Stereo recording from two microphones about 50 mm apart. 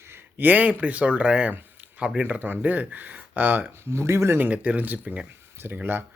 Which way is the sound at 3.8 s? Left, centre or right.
Right.